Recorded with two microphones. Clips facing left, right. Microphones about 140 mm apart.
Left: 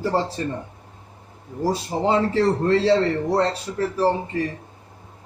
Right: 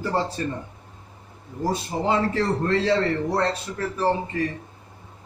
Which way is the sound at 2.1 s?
30° left (ahead or behind).